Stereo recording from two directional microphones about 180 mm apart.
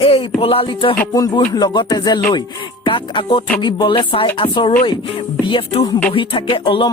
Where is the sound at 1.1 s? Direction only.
20° left (ahead or behind).